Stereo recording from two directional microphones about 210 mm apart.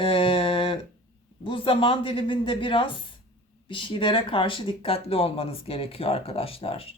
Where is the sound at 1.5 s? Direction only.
25° left (ahead or behind).